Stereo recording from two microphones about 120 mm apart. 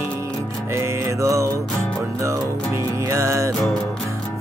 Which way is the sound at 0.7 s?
25° right (ahead or behind).